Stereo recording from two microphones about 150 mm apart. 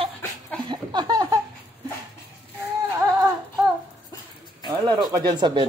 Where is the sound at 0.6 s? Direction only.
30° right (ahead or behind).